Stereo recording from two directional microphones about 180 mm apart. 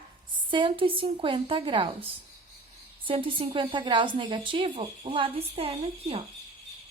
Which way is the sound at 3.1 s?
30° right (ahead or behind).